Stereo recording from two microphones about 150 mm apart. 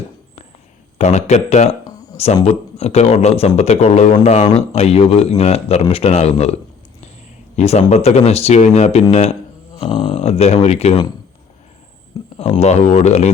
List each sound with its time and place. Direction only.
0.9 s speech: 50° left (ahead or behind)
9.9 s a sound: 50° left (ahead or behind)
12.4 s speech: 50° left (ahead or behind)